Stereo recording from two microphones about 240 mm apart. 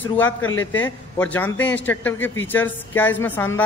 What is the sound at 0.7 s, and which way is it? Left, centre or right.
A man's voice, centre.